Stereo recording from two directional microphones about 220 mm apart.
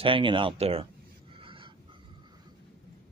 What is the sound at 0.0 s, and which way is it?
Speech, 20° right (ahead or behind).